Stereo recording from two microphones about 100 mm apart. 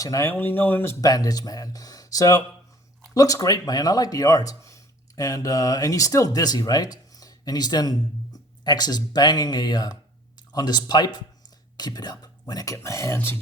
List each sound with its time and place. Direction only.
0.0 s speech: 35° left (ahead or behind)
0.3 s speech: 20° left (ahead or behind)
1.0 s speech: 40° left (ahead or behind)
13.1 s speech: 20° left (ahead or behind)